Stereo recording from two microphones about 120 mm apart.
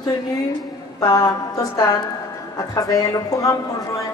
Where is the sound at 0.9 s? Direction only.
30° left (ahead or behind).